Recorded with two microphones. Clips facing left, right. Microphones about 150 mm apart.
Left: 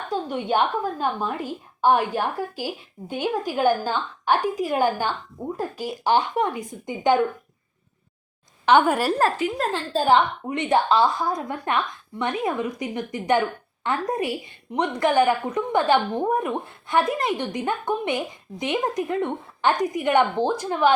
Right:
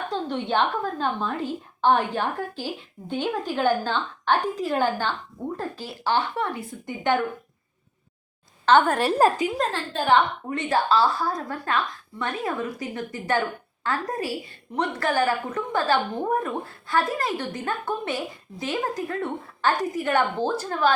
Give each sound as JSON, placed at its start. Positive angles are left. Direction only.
{"t": 0.1, "sound": "a woman's voice", "side_deg": 10}
{"t": 8.6, "sound": "a woman's voice", "side_deg": 10}
{"t": 9.1, "sound": "a woman's voice", "side_deg": -15}
{"t": 9.9, "sound": "a woman's voice", "side_deg": 35}
{"t": 10.4, "sound": "a woman's voice", "side_deg": 20}